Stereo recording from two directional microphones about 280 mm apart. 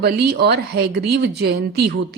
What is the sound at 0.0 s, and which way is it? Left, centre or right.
A woman's voice, right.